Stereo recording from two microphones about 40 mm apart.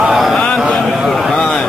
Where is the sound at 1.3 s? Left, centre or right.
Centre.